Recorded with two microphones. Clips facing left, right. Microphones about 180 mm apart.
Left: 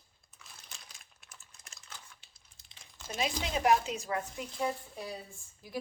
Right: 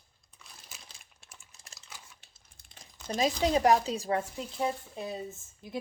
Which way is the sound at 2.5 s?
50° right (ahead or behind).